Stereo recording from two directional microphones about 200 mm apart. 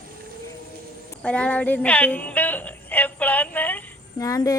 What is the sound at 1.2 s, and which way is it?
Music, 5° left (ahead or behind).